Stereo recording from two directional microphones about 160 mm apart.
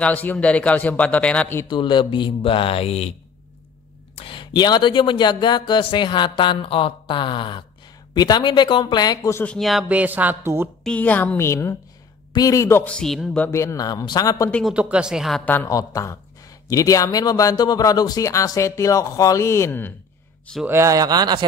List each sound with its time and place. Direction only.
0.0 s speech: 10° left (ahead or behind)
1.7 s speech: 30° left (ahead or behind); by 10.7 s 15° right (ahead or behind)
10.8 s a man's voice: 5° left (ahead or behind)
12.9 s speech: centre (ahead or behind)
13.5 s a man's voice: 15° left (ahead or behind)
14.5 s speech: 5° right (ahead or behind)
15.4 s a man's voice: 15° left (ahead or behind)
20.6 s speech: 15° right (ahead or behind)